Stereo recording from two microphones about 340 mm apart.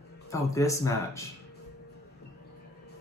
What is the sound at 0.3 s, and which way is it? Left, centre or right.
Speech, centre.